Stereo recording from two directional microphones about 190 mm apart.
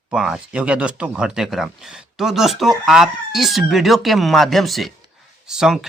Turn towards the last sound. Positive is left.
turn(degrees=-5)  # may be behind; listen again after turning